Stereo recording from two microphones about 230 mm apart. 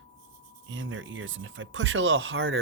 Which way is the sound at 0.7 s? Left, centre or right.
Right.